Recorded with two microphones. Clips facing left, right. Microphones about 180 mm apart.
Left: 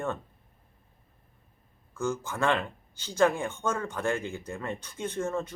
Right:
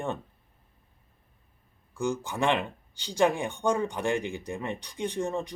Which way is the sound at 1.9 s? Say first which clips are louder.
Right 1 dB; 15° right (ahead or behind).